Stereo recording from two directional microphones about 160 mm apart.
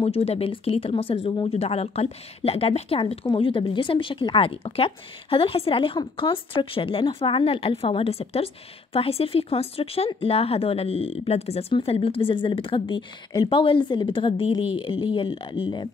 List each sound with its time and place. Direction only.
0.0 s speech: 40° left (ahead or behind)